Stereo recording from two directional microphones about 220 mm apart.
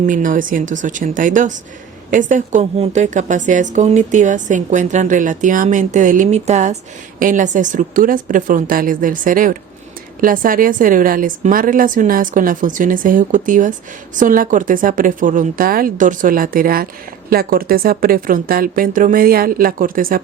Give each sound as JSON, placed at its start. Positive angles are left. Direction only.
{"t": 0.0, "sound": "a woman's voice", "side_deg": -35}